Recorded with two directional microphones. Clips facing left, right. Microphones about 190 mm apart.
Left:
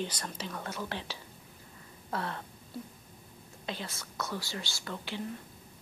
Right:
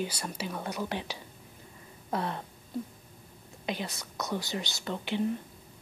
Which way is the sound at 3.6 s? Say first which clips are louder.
Right 5 dB; 15° right (ahead or behind).